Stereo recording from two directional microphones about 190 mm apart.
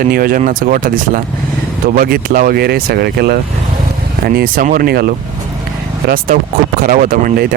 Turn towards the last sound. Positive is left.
turn(degrees=-50)  # may be behind; listen again after turning